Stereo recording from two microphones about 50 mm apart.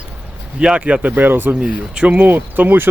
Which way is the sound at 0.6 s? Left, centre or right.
Right.